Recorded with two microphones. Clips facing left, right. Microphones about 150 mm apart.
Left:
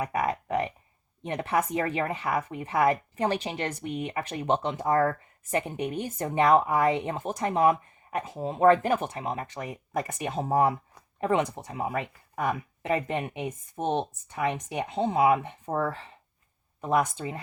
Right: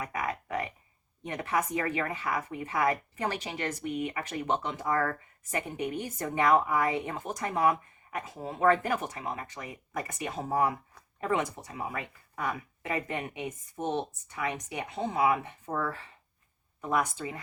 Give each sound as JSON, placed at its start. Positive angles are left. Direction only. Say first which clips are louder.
{"t": 0.0, "sound": "a sound", "louder": "left 6 dB", "side_deg": 30}
{"t": 1.2, "sound": "speech", "louder": "left 4 dB", "side_deg": 30}
{"t": 15.7, "sound": "speech", "louder": "left 4 dB", "side_deg": 35}